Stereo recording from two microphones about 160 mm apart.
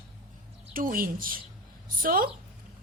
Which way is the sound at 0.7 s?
60° right (ahead or behind).